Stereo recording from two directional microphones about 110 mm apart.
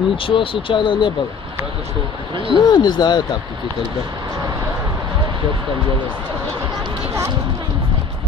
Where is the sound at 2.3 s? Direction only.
50° right (ahead or behind).